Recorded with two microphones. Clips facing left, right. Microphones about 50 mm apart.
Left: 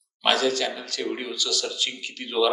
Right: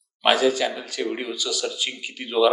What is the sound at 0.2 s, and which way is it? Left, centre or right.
Speech, centre.